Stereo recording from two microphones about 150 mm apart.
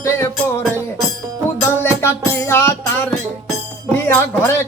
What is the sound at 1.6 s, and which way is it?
Music, 15° left (ahead or behind).